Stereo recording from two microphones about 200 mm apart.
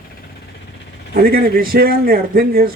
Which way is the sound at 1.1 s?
50° right (ahead or behind).